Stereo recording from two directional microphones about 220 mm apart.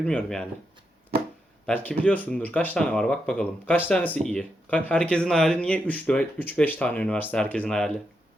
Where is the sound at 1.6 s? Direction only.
5° left (ahead or behind).